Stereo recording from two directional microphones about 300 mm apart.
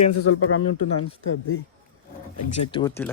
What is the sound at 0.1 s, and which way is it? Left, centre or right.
Speech, left.